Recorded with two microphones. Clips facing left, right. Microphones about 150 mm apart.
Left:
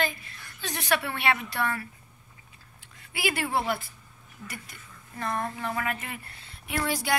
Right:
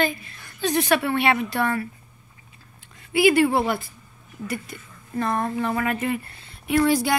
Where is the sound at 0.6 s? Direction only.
20° right (ahead or behind).